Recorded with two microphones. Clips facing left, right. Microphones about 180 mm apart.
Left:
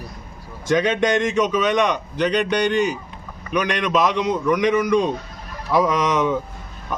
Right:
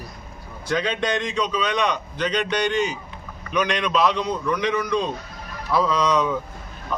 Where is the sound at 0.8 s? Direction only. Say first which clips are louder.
Left 5 dB; 20° left (ahead or behind).